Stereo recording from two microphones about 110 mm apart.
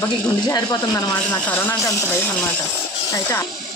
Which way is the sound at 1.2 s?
15° left (ahead or behind).